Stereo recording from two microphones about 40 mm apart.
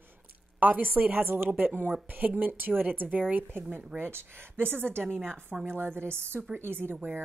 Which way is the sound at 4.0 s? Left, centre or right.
Right.